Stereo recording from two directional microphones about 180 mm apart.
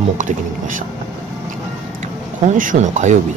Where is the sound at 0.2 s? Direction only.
45° right (ahead or behind).